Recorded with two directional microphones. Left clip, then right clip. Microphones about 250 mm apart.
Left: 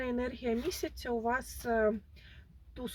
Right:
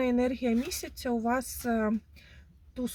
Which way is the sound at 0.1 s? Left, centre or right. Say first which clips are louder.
Right 6 dB; centre.